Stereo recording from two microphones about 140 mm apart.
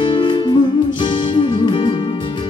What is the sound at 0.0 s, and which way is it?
Music, 35° left (ahead or behind).